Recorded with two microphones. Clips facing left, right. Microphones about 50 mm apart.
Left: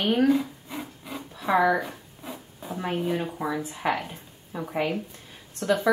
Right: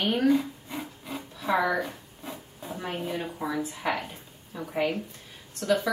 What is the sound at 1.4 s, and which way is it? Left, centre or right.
Speech, centre.